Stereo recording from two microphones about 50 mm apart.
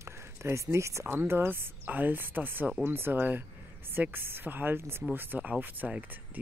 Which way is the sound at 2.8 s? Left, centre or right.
Right.